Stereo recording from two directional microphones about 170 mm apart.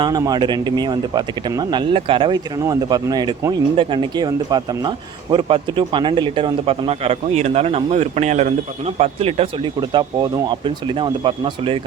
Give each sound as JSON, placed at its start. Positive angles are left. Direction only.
{"t": 0.0, "sound": "speech", "side_deg": -20}
{"t": 9.9, "sound": "speech", "side_deg": -25}